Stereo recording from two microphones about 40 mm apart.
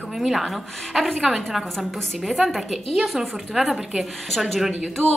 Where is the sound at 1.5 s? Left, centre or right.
Centre.